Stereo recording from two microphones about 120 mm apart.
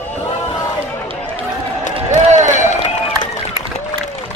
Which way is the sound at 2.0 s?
65° right (ahead or behind).